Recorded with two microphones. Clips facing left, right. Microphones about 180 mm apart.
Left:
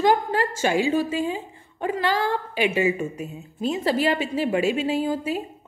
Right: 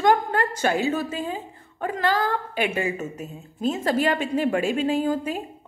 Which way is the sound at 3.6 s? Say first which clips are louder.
Even; 45° right (ahead or behind).